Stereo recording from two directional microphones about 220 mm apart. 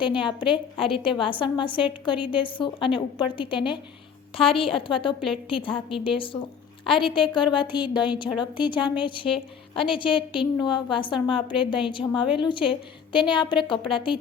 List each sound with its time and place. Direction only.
0.0 s a woman's voice: 20° left (ahead or behind)